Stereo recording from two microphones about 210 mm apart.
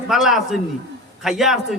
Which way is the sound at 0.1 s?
Centre (ahead or behind).